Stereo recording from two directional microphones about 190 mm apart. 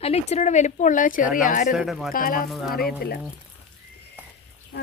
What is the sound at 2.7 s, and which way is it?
Speech, 55° left (ahead or behind).